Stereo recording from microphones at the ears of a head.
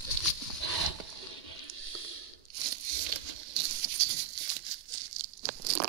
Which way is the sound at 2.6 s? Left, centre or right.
Right.